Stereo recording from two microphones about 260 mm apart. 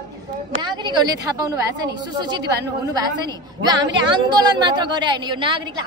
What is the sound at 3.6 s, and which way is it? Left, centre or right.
A woman's voice, centre.